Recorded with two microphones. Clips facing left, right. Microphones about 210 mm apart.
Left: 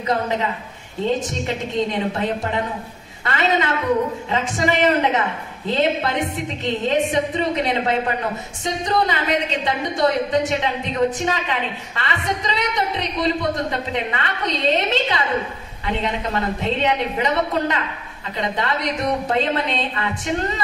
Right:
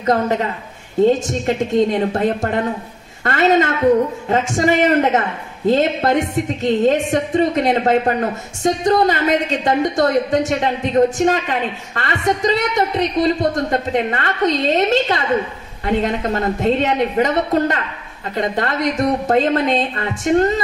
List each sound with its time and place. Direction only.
0.0 s a woman's voice: 45° right (ahead or behind)